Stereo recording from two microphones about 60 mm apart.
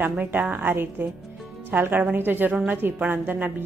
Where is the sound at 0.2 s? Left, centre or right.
Right.